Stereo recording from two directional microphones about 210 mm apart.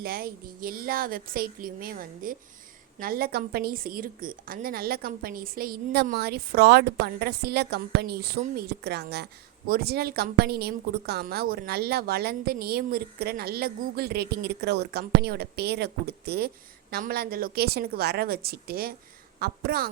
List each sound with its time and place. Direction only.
0.0 s a woman's voice: 45° right (ahead or behind)